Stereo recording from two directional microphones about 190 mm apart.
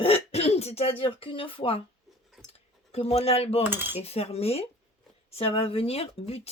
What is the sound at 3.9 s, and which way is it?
Speech, 30° left (ahead or behind).